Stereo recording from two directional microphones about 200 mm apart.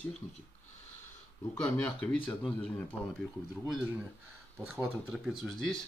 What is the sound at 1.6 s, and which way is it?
Speech, 10° left (ahead or behind).